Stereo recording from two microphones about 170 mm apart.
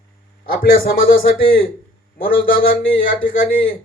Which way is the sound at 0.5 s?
60° left (ahead or behind).